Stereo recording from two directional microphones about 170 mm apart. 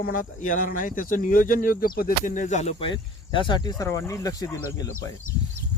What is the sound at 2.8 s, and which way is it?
Speech, 30° left (ahead or behind).